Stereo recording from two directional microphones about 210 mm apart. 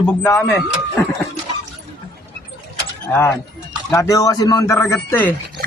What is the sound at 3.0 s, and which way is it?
A man's voice, 10° left (ahead or behind).